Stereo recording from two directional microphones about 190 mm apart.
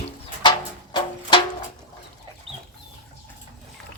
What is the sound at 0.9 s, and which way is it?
Music, 25° left (ahead or behind).